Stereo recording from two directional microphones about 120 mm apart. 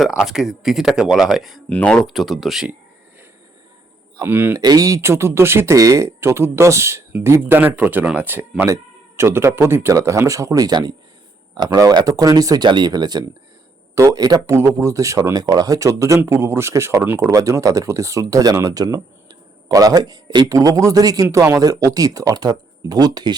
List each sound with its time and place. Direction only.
0.0 s speech: 5° right (ahead or behind)
4.2 s speech: 15° right (ahead or behind)
4.6 s a man's voice: 30° right (ahead or behind)